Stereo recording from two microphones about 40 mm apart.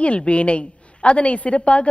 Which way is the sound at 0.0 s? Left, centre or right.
Left.